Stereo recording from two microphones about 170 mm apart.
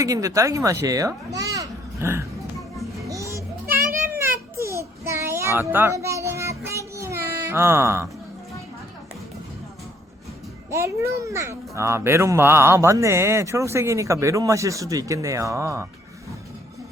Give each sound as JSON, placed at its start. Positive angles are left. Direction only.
{"t": 0.0, "sound": "a child's voice", "side_deg": -20}
{"t": 3.1, "sound": "children playing", "side_deg": -20}
{"t": 4.2, "sound": "a sound", "side_deg": -15}
{"t": 10.7, "sound": "a child's voice", "side_deg": -15}